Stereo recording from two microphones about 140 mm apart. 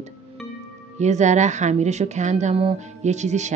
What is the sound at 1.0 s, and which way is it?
Speech, 55° right (ahead or behind).